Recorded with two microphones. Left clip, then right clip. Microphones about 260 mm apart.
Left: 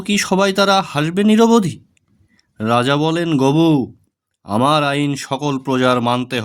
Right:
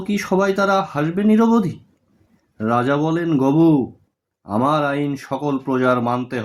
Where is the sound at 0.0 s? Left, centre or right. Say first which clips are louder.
Left 3 dB; left.